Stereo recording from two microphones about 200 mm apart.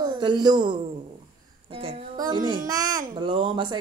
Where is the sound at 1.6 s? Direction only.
30° right (ahead or behind).